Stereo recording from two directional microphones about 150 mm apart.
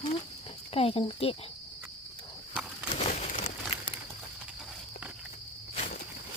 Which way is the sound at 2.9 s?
50° left (ahead or behind).